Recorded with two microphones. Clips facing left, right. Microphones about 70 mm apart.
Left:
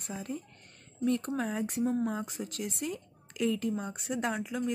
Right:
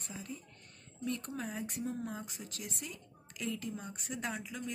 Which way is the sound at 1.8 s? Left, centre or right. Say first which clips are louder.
Left 11 dB; left.